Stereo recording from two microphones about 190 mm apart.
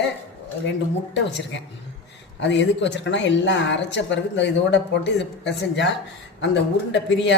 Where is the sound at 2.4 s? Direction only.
70° left (ahead or behind).